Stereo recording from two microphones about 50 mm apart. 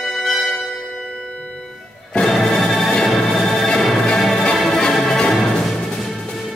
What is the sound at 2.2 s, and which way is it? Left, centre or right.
Music, centre.